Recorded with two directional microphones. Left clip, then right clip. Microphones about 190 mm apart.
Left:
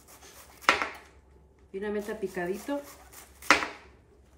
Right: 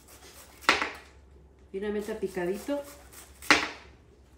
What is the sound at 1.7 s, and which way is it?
Speech, 5° right (ahead or behind).